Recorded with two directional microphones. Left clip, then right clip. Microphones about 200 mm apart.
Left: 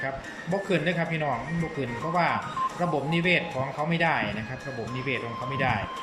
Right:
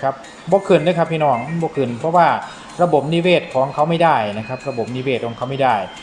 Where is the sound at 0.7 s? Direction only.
15° right (ahead or behind).